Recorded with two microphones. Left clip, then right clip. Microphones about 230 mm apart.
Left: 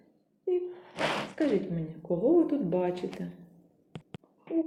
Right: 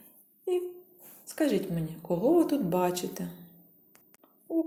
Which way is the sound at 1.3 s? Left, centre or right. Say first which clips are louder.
Even; right.